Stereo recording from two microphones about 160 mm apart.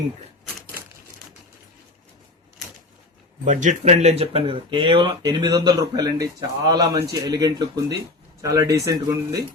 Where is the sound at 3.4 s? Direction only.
50° right (ahead or behind).